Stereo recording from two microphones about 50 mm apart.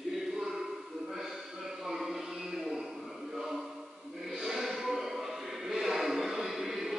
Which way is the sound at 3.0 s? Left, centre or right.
Centre.